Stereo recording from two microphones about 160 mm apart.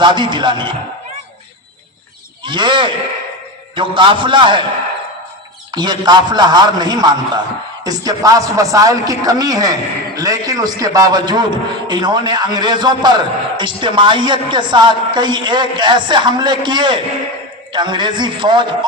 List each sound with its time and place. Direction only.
0.0 s a man's voice: 30° right (ahead or behind)
2.4 s a man's voice: 30° right (ahead or behind)
5.7 s a man's voice: 25° right (ahead or behind)